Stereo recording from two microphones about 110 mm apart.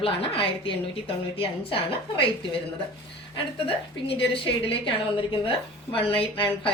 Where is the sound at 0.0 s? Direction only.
55° left (ahead or behind).